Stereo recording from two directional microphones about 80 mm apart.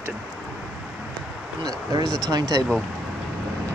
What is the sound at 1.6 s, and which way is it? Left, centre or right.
Speech, right.